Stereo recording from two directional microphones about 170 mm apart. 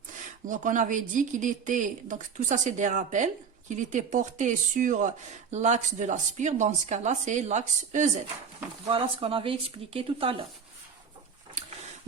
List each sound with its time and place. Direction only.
0.4 s speech: 50° right (ahead or behind)
8.9 s speech: 30° right (ahead or behind)